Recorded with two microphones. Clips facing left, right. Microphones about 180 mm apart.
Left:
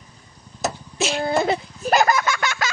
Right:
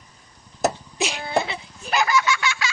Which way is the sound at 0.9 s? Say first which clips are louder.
Left 3 dB; 15° right (ahead or behind).